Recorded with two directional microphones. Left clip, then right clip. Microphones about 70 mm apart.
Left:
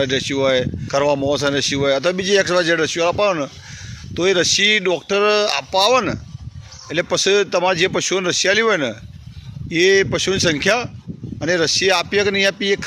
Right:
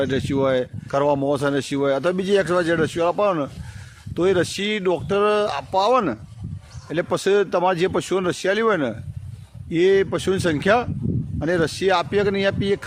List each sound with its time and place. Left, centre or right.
0.0 s speech: right